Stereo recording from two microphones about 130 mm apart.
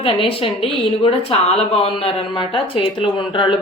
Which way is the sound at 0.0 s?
45° left (ahead or behind).